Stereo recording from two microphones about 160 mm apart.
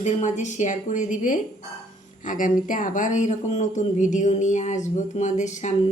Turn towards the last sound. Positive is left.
turn(degrees=50)  # may be behind; listen again after turning